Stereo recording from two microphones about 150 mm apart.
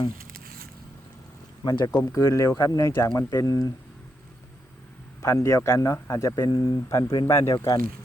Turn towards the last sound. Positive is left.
turn(degrees=20)  # may be behind; listen again after turning